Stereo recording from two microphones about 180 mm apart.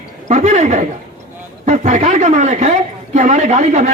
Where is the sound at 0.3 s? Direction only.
40° right (ahead or behind).